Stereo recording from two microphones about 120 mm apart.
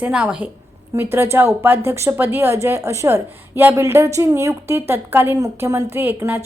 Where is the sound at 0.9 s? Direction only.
20° right (ahead or behind).